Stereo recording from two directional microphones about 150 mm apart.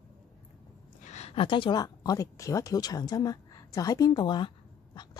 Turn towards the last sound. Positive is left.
turn(degrees=30)  # may be behind; listen again after turning